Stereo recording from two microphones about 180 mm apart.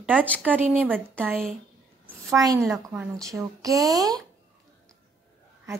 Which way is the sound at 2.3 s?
20° right (ahead or behind).